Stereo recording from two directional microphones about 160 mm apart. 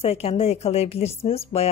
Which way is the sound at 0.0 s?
40° left (ahead or behind).